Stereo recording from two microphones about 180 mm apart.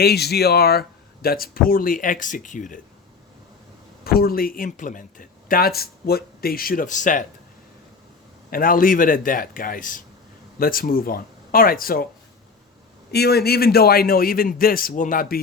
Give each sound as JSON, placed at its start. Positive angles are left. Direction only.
{"t": 0.0, "sound": "speech", "side_deg": 60}
{"t": 4.0, "sound": "speech", "side_deg": 55}
{"t": 8.4, "sound": "speech", "side_deg": 50}
{"t": 13.1, "sound": "a man's voice", "side_deg": 65}